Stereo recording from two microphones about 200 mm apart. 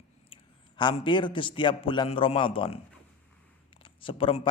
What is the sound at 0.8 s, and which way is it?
A man's voice, 25° left (ahead or behind).